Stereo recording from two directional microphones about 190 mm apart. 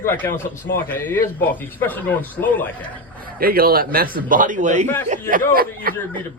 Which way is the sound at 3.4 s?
50° right (ahead or behind).